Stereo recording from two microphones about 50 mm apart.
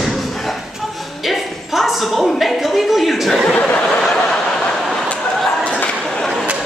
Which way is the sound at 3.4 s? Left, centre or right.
Centre.